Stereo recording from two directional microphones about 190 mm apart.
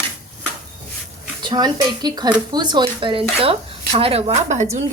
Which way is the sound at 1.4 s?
20° right (ahead or behind).